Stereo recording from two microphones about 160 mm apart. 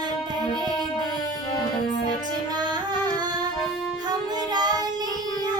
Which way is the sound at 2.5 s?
25° right (ahead or behind).